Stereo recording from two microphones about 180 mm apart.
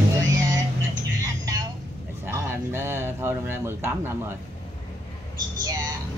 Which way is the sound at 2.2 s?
15° right (ahead or behind).